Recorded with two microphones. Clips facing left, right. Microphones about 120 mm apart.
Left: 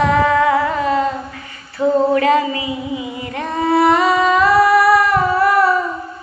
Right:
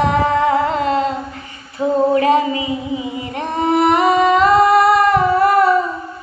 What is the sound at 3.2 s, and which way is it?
Female singing, 20° right (ahead or behind).